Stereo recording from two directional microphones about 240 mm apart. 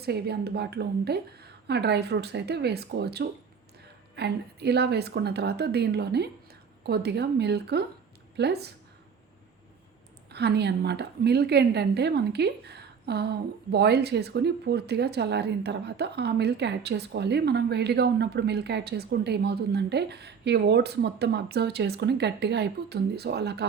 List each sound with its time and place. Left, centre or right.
0.0 s a woman's voice: right
10.3 s a woman's voice: right